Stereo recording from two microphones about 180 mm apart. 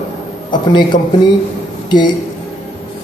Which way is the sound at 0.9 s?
45° left (ahead or behind).